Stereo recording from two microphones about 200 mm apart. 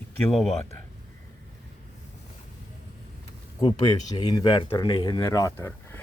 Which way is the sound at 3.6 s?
20° left (ahead or behind).